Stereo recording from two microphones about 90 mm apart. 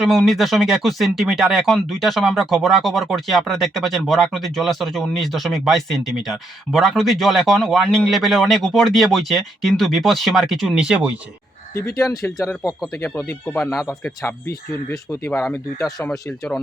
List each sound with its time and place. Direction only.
0.0 s speech: 5° right (ahead or behind)
11.8 s speech: 30° left (ahead or behind)
16.0 s speech: 5° left (ahead or behind)